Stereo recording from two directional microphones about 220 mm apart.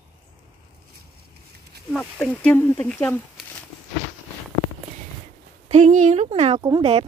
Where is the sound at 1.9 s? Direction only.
5° left (ahead or behind).